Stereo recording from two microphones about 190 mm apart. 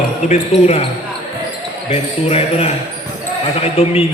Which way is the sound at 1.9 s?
30° left (ahead or behind).